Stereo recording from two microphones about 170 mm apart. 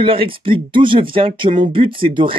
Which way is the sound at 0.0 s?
30° right (ahead or behind).